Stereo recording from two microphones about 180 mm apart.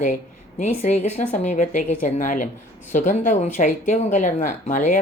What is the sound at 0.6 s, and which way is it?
Speech, 40° left (ahead or behind).